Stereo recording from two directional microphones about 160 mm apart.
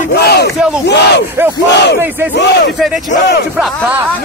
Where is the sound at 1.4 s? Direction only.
15° right (ahead or behind).